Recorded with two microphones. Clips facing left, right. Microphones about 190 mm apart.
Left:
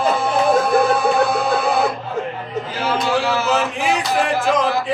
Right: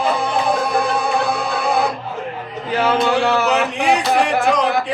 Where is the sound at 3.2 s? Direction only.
60° right (ahead or behind).